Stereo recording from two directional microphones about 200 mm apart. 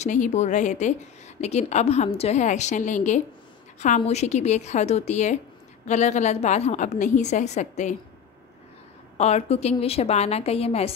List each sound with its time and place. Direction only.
0.0 s a woman's voice: 35° left (ahead or behind)
9.2 s a woman's voice: 30° left (ahead or behind)